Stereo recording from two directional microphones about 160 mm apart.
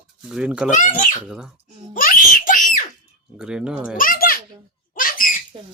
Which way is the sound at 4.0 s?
65° left (ahead or behind).